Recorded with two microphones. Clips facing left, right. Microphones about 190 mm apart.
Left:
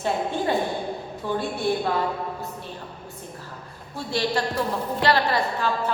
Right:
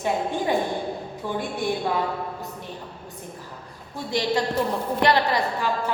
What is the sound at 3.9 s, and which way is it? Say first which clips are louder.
Music: right 1 dB; 20° right (ahead or behind).